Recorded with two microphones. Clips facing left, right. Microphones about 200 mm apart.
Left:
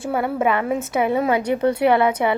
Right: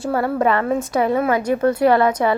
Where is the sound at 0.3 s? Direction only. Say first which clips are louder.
Right 2 dB; 5° left (ahead or behind).